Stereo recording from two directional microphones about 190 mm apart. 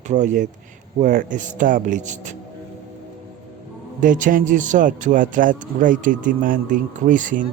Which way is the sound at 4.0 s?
45° right (ahead or behind).